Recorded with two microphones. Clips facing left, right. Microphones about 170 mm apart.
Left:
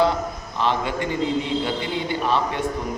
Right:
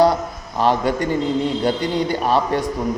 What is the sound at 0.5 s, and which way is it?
A man's voice, 45° right (ahead or behind).